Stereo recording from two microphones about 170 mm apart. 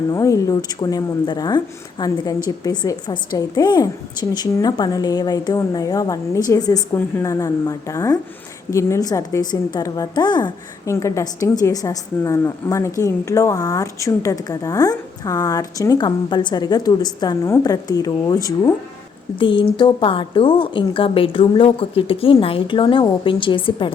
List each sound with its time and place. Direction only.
0.1 s a woman's voice: 20° left (ahead or behind)